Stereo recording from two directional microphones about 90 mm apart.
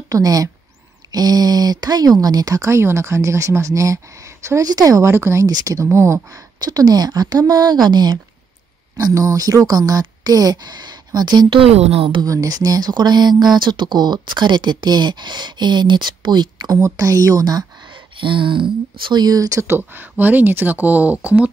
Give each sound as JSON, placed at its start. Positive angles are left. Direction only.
{"t": 0.1, "sound": "speech", "side_deg": -40}
{"t": 5.1, "sound": "speech", "side_deg": -30}
{"t": 5.5, "sound": "speech", "side_deg": -45}
{"t": 5.9, "sound": "speech", "side_deg": -30}
{"t": 6.6, "sound": "speech", "side_deg": -45}
{"t": 11.6, "sound": "speech", "side_deg": -90}
{"t": 12.2, "sound": "speech", "side_deg": -45}
{"t": 16.8, "sound": "speech", "side_deg": -35}
{"t": 19.2, "sound": "speech", "side_deg": -40}
{"t": 19.6, "sound": "speech", "side_deg": -25}